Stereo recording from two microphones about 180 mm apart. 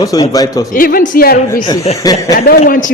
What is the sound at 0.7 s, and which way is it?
Speech, 50° left (ahead or behind).